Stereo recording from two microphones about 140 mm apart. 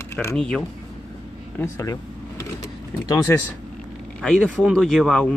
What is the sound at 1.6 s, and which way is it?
Power windows, 20° left (ahead or behind).